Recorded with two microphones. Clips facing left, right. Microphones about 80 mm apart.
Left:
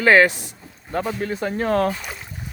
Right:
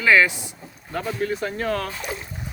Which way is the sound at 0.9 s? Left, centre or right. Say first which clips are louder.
Left 1 dB; left.